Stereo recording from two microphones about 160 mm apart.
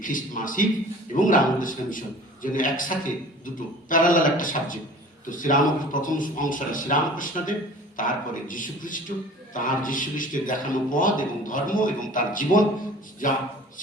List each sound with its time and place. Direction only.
0.0 s speech: 55° left (ahead or behind)